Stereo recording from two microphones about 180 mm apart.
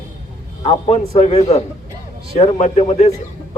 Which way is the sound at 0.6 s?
30° left (ahead or behind).